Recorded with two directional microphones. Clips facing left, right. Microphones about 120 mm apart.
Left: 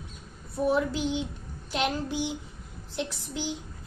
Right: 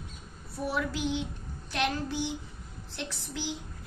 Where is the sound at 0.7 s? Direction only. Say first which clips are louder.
Left 4 dB; 25° left (ahead or behind).